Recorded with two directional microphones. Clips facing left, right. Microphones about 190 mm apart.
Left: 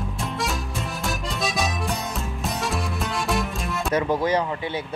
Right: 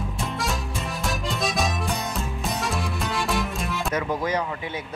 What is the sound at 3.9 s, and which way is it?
Speech, 30° left (ahead or behind).